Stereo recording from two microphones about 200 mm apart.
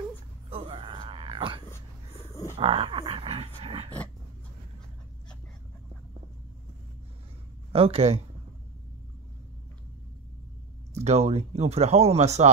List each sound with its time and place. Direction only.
0.5 s a sound: 30° right (ahead or behind)
7.7 s speech: 30° right (ahead or behind)
11.1 s speech: 35° right (ahead or behind)